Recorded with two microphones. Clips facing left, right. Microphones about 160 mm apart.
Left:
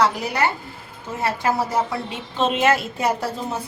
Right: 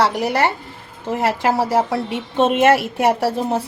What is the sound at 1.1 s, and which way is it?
Speech, 90° right.